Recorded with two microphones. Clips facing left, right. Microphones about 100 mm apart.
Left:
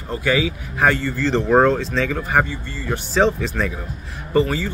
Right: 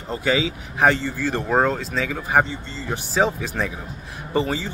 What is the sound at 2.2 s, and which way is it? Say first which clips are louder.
A man's voice: even; 20° right (ahead or behind).